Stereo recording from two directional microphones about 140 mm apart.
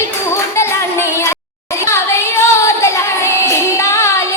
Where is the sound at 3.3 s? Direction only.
20° left (ahead or behind).